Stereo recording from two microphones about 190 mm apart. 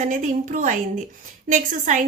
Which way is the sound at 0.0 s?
40° right (ahead or behind).